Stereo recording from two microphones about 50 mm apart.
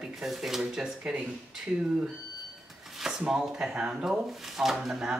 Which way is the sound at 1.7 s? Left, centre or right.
Right.